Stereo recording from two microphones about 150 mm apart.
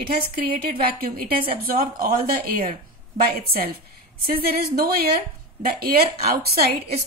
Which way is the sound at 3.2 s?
90° right.